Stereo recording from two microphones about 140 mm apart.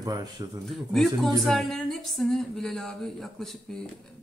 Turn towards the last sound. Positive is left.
turn(degrees=0)  # may be behind; listen again after turning